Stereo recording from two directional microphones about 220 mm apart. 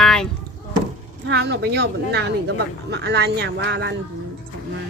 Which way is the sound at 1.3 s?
50° right (ahead or behind).